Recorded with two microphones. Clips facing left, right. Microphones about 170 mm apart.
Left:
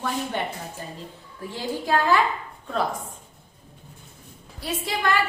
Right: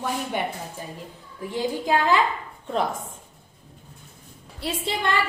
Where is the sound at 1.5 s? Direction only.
15° right (ahead or behind).